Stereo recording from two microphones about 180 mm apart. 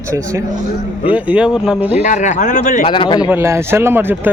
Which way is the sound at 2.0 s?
40° left (ahead or behind).